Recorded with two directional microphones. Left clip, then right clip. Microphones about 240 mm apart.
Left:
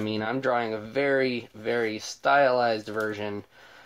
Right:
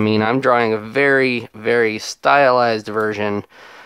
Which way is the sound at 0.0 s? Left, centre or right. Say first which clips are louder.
Right 12 dB; right.